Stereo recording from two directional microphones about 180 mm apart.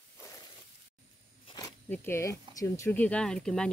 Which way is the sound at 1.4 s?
20° left (ahead or behind).